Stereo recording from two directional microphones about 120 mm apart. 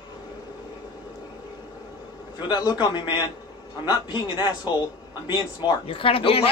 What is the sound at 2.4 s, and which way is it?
A man's voice, 35° left (ahead or behind).